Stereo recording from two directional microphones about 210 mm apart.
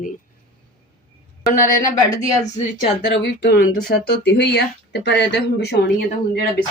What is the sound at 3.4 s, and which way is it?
Speech, 50° left (ahead or behind).